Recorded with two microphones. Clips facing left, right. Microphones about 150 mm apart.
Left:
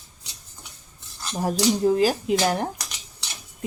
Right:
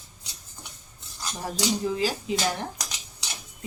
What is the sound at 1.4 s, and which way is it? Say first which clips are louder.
Speech: left 7 dB; 50° left (ahead or behind).